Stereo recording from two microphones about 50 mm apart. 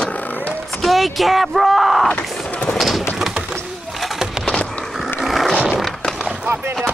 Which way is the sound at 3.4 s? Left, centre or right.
Centre.